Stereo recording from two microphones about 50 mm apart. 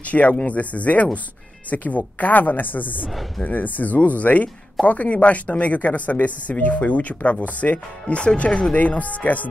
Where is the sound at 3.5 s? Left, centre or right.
Left.